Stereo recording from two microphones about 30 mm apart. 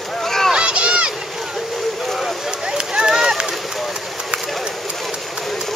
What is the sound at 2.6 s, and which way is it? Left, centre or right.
Run, right.